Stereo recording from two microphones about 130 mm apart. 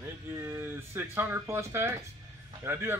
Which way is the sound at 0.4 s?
20° right (ahead or behind).